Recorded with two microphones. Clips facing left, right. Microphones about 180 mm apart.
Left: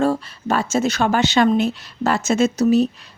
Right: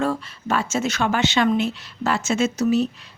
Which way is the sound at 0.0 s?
35° left (ahead or behind).